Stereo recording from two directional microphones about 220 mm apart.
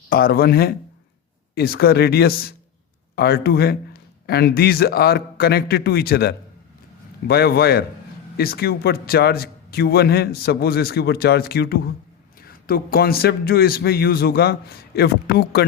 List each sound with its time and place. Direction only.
0.1 s a man's voice: 45° left (ahead or behind)